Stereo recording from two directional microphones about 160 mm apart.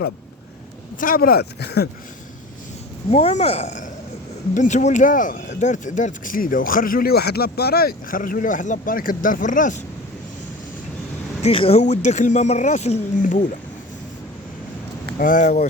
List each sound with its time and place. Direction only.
0.9 s speech: 60° left (ahead or behind); by 1.9 s 90° left
3.1 s speech: 40° left (ahead or behind)
11.4 s speech: 35° left (ahead or behind); by 13.5 s 55° left (ahead or behind)
15.2 s speech: 55° left (ahead or behind)